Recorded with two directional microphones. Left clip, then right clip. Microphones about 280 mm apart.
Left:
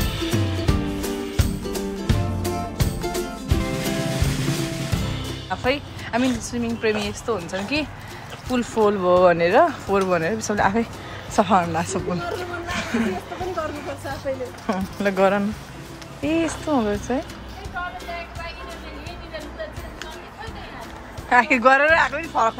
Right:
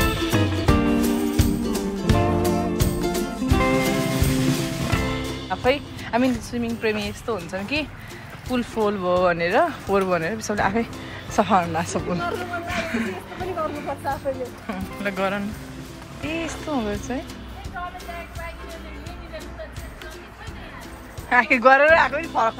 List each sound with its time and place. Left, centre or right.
0.0 s music: centre
8.5 s speech: centre
14.7 s speech: centre
21.3 s speech: centre